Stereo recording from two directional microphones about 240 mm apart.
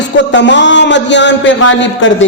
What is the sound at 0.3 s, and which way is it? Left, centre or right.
A man's voice, left.